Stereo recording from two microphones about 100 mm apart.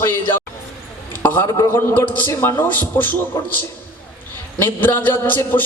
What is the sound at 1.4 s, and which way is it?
Speech, 35° left (ahead or behind).